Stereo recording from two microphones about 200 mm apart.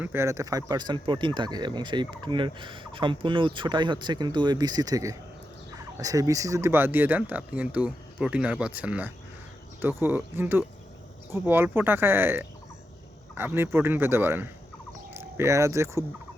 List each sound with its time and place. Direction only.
0.0 s speech: 10° right (ahead or behind)